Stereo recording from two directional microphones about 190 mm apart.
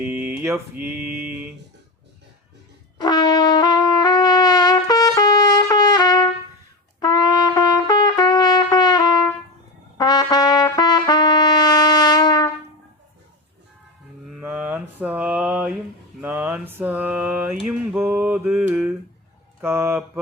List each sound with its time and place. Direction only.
0.0 s mantra: 10° right (ahead or behind)
3.0 s brass instrument: 20° left (ahead or behind)
7.0 s trumpet: 20° left (ahead or behind)
14.3 s mantra: 5° right (ahead or behind)